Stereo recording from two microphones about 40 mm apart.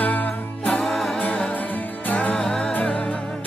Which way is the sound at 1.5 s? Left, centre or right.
Left.